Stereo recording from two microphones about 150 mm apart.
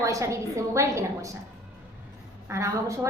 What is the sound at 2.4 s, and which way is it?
Speech, 20° right (ahead or behind).